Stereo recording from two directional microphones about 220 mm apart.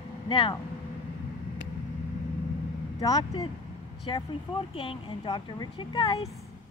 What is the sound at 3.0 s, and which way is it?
Speech, 20° left (ahead or behind).